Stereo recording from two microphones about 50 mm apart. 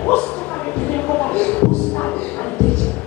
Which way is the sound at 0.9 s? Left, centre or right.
Left.